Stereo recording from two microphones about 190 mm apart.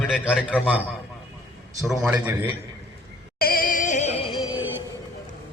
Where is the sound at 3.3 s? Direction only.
50° left (ahead or behind); by 4.4 s 35° left (ahead or behind).